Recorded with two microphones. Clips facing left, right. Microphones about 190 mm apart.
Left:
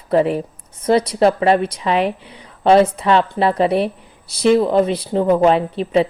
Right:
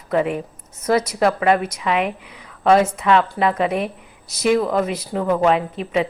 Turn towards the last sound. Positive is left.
turn(degrees=35)  # may be behind; listen again after turning